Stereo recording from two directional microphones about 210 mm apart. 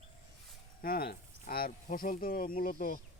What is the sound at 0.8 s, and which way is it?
Speech, 45° left (ahead or behind).